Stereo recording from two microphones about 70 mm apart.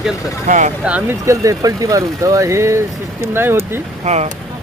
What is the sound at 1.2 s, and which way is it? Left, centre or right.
Speech, right.